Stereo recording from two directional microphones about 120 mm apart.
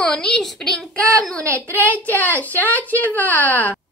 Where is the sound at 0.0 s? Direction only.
5° left (ahead or behind).